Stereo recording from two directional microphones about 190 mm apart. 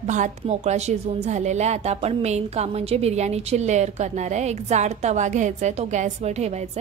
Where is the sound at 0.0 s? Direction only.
40° right (ahead or behind).